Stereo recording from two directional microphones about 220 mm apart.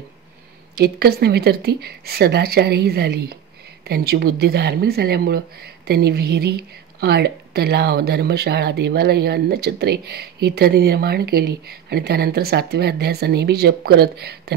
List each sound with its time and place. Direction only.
0.7 s speech: 45° right (ahead or behind)